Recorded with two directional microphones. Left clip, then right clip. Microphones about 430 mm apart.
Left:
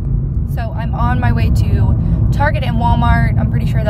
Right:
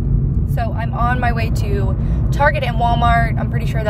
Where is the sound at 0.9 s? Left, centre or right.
Centre.